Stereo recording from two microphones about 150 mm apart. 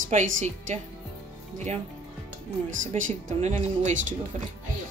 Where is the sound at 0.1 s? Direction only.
55° right (ahead or behind).